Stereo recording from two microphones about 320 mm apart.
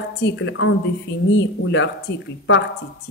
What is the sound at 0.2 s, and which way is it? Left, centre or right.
A man's voice, left.